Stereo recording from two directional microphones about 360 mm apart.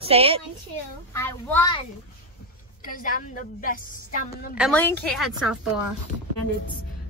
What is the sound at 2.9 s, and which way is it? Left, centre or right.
Speech, left.